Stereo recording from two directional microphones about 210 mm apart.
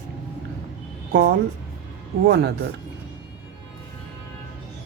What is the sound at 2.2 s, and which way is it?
Speech, 50° right (ahead or behind).